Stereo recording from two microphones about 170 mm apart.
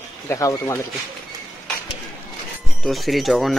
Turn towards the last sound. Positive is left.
turn(degrees=0)  # may be behind; listen again after turning